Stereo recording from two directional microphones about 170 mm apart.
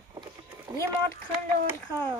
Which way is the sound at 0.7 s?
25° right (ahead or behind).